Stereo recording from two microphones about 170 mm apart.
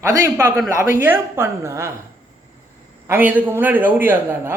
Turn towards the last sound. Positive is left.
turn(degrees=-10)  # may be behind; listen again after turning